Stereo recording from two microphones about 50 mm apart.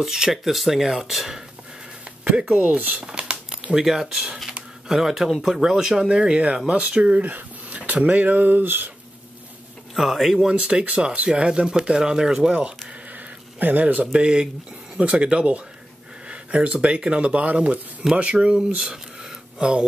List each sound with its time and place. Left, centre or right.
0.0 s speech: centre
2.5 s speech: right
3.1 s a sound: right
3.8 s speech: centre; by 8.9 s right
9.9 s speech: centre
10.5 s speech: centre
13.6 s speech: right
14.1 s speech: centre